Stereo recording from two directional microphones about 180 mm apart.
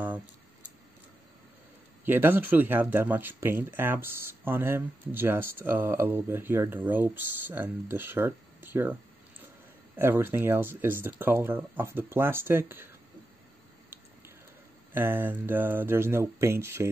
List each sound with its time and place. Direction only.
2.0 s speech: 10° right (ahead or behind)
9.9 s speech: 10° right (ahead or behind)
14.9 s speech: 10° right (ahead or behind)